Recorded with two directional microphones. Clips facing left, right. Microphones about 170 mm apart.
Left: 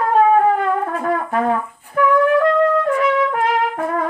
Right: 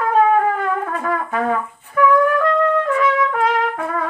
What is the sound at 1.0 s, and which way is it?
Brass instrument, 35° left (ahead or behind).